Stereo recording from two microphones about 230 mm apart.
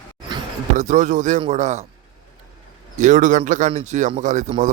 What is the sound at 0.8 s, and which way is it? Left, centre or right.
A man's voice, right.